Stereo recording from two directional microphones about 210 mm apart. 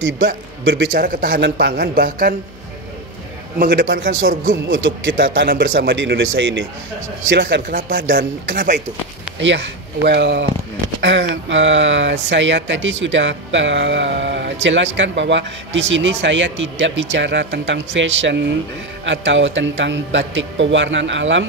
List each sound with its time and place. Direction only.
0.7 s speech: 55° right (ahead or behind)
1.0 s a man's voice: 45° right (ahead or behind)
3.5 s a man's voice: 40° right (ahead or behind)
3.8 s speech: 65° right (ahead or behind)
7.7 s speech: 40° right (ahead or behind)
9.4 s a man's voice: 60° right (ahead or behind)